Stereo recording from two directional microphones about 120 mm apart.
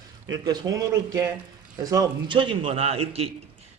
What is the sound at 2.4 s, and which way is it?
Speech, 50° right (ahead or behind).